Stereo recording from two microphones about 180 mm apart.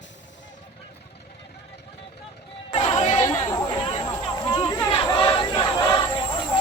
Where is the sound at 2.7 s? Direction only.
35° left (ahead or behind).